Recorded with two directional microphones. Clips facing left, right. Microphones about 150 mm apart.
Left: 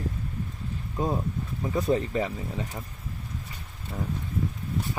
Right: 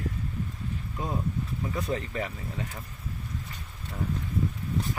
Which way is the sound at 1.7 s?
25° left (ahead or behind).